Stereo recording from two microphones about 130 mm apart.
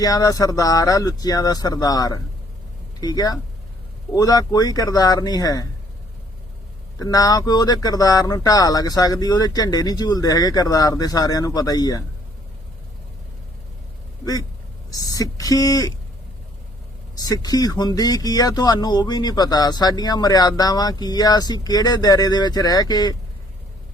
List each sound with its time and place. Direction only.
0.0 s speech: 25° left (ahead or behind)
7.0 s speech: 30° left (ahead or behind)
14.9 s speech: 25° left (ahead or behind)
17.2 s speech: 30° left (ahead or behind)